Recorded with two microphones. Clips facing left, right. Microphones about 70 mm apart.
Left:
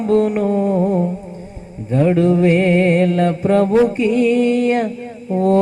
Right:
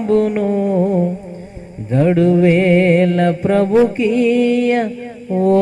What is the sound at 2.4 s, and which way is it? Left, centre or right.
Music, right.